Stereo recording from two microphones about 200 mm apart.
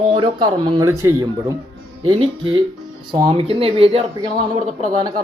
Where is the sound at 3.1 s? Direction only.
25° right (ahead or behind).